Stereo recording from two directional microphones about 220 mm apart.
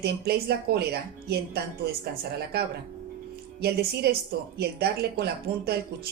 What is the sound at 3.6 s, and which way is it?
Speech, 45° right (ahead or behind).